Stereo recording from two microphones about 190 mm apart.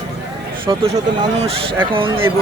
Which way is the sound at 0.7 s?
25° right (ahead or behind).